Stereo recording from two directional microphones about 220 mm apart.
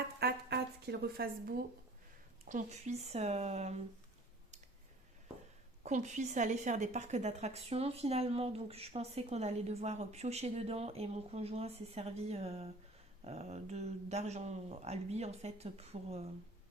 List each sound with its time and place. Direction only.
0.2 s a sound: 45° right (ahead or behind)
2.4 s a woman's voice: 35° right (ahead or behind)
5.8 s a woman's voice: 30° right (ahead or behind)